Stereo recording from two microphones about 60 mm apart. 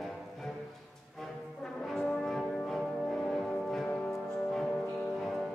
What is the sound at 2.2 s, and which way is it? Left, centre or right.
Music, centre.